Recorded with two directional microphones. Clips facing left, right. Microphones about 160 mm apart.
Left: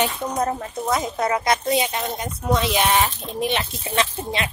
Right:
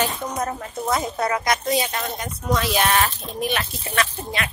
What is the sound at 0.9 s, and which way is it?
Speech, 20° left (ahead or behind).